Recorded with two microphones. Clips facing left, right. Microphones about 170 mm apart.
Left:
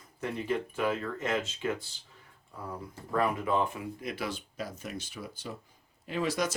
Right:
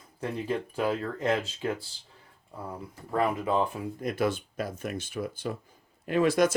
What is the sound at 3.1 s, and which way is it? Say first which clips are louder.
Speech: right 2 dB; 30° right (ahead or behind).